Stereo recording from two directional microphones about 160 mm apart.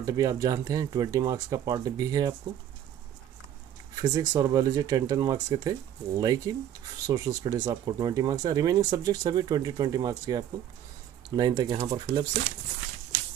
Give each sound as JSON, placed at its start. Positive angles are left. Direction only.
{"t": 0.0, "sound": "speech", "side_deg": -20}
{"t": 3.9, "sound": "speech", "side_deg": -20}